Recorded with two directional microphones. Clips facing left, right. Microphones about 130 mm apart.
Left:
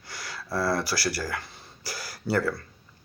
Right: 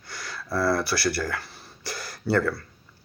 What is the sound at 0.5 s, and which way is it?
Speech, 25° left (ahead or behind).